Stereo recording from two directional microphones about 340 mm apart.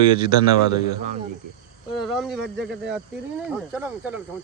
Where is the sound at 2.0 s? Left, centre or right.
Centre.